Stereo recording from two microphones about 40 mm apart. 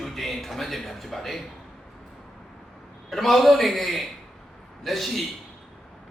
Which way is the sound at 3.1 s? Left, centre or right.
Centre.